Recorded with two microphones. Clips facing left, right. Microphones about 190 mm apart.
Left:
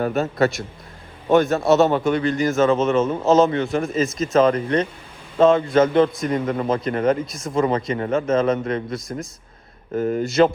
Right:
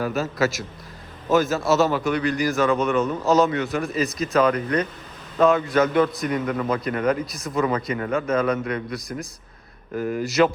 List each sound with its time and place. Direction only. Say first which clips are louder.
0.1 s a man's voice: left 3 dB; centre (ahead or behind)
1.9 s a man's voice: left 3 dB; 25° left (ahead or behind)
3.8 s a man's voice: left 3 dB; centre (ahead or behind)
4.4 s a man's voice: left 3 dB; 25° left (ahead or behind)
7.3 s a man's voice: left 2 dB; centre (ahead or behind)
7.5 s a man's voice: left 3 dB; 25° left (ahead or behind)